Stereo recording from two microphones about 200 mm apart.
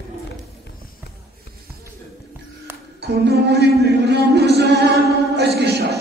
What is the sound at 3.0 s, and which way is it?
A man's voice, 55° right (ahead or behind).